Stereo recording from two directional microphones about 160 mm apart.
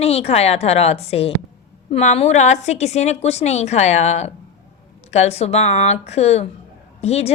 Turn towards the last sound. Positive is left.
turn(degrees=40)  # may be behind; listen again after turning